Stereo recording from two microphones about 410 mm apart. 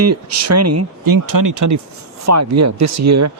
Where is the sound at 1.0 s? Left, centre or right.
Right.